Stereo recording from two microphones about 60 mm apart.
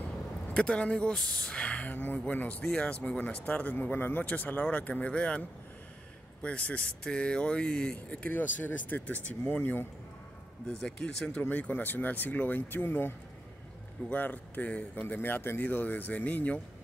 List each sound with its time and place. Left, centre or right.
0.6 s speech: centre
6.4 s speech: left
10.7 s speech: centre
11.3 s speech: left
15.1 s speech: left